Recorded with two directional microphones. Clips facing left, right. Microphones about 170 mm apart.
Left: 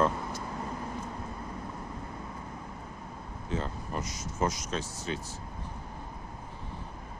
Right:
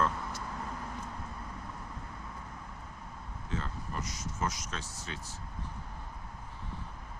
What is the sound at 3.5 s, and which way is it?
Speech, 20° left (ahead or behind).